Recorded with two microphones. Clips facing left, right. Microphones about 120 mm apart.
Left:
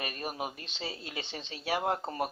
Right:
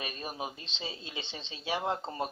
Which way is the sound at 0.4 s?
20° right (ahead or behind).